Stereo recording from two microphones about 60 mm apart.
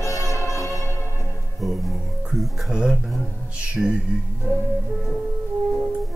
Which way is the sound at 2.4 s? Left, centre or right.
Centre.